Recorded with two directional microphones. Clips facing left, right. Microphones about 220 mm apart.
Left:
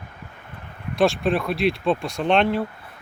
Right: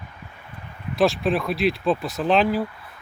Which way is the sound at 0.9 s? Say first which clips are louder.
Even; centre (ahead or behind).